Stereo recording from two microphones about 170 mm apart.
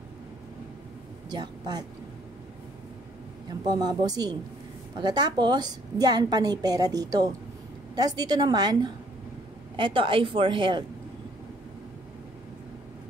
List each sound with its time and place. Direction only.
1.3 s a woman's voice: 25° right (ahead or behind)
3.4 s a woman's voice: 25° right (ahead or behind)